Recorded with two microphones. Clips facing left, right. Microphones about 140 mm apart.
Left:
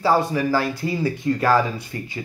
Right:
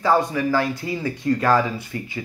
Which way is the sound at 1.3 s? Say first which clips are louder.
Even; 15° left (ahead or behind).